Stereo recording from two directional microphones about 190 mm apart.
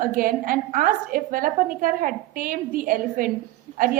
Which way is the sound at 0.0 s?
50° right (ahead or behind).